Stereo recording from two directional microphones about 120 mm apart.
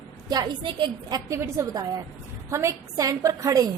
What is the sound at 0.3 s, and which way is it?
Speech, 35° right (ahead or behind).